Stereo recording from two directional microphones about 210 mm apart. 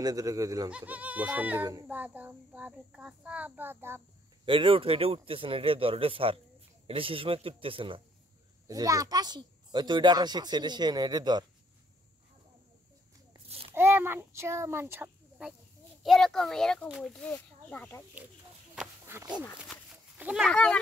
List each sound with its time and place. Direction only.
0.0 s a child's voice: 15° right (ahead or behind)
4.5 s a child's voice: 25° right (ahead or behind)
13.7 s a child's voice: 10° right (ahead or behind); by 18.0 s 10° left (ahead or behind)
18.8 s a sound: 10° right (ahead or behind)